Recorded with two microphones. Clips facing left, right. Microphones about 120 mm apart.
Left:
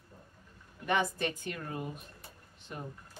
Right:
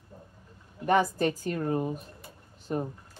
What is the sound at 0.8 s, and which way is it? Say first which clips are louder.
A woman's voice: right 7 dB; 40° right (ahead or behind).